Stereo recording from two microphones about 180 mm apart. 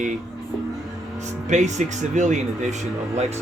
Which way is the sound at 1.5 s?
40° right (ahead or behind).